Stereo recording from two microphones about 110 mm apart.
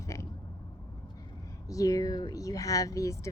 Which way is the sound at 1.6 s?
30° left (ahead or behind).